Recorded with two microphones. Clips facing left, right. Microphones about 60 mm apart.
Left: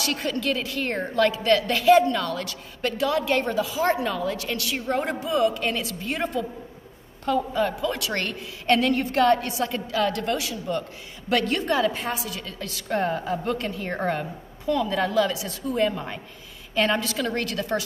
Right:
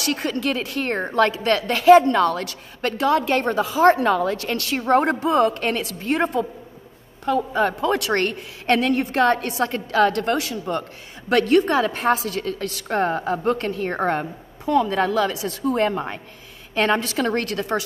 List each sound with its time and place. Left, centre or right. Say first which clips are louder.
0.0 s a woman's voice: right 3 dB; right
12.1 s a woman's voice: right 10 dB; right
13.4 s a woman's voice: right 6 dB; right